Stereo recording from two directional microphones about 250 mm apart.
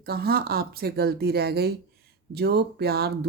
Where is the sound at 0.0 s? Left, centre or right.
Right.